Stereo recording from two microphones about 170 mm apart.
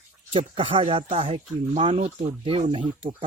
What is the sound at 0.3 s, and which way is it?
Speech, 30° right (ahead or behind).